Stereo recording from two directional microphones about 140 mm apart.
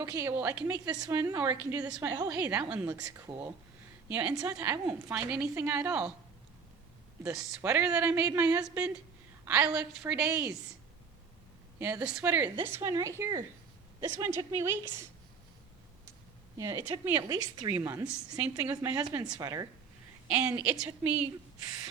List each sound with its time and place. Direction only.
0.0 s a woman's voice: 20° right (ahead or behind)
2.0 s a woman's voice: 20° right (ahead or behind)
2.4 s a woman's voice: 10° right (ahead or behind)
4.1 s a woman's voice: 10° right (ahead or behind)
7.6 s a woman's voice: 10° right (ahead or behind)
11.8 s a woman's voice: 15° right (ahead or behind)
16.6 s a woman's voice: 20° right (ahead or behind)
17.2 s a woman's voice: 25° right (ahead or behind)
20.2 s a woman's voice: 10° right (ahead or behind)